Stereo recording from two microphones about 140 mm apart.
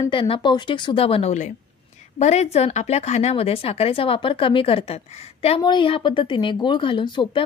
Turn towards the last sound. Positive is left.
turn(degrees=35)  # may be behind; listen again after turning